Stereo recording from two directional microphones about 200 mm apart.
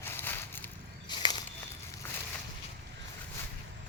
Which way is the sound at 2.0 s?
10° left (ahead or behind).